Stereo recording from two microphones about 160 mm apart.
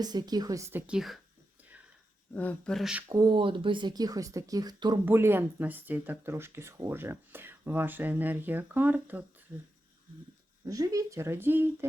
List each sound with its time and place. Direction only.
0.0 s speech: 25° right (ahead or behind); by 1.2 s centre (ahead or behind)
2.3 s speech: 10° left (ahead or behind)
3.1 s speech: 25° right (ahead or behind)
5.0 s speech: 15° right (ahead or behind)
10.7 s speech: 20° right (ahead or behind)